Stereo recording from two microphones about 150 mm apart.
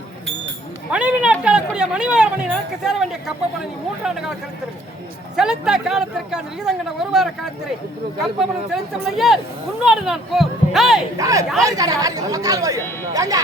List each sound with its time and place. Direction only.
0.9 s speech: 10° right (ahead or behind)
5.4 s speech: 5° right (ahead or behind)
11.2 s speech: 20° right (ahead or behind)